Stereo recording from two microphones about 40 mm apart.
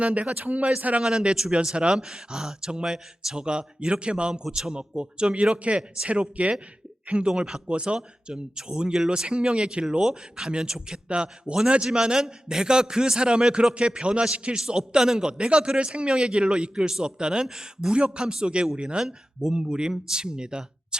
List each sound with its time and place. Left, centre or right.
0.0 s speech: right
1.0 s a man's voice: centre
19.0 s a man's voice: centre